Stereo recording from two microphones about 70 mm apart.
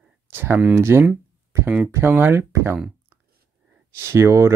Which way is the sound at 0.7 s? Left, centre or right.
Right.